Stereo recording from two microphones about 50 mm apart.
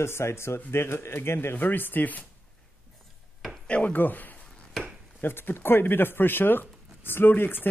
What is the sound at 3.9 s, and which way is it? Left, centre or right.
Speech, left.